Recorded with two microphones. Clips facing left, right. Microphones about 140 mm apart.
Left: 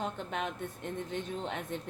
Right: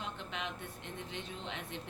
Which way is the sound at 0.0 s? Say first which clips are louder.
Left 6 dB; 45° left (ahead or behind).